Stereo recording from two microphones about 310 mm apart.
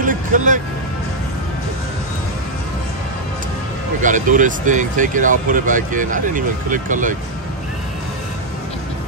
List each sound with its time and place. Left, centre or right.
0.0 s music: right
4.0 s speech: right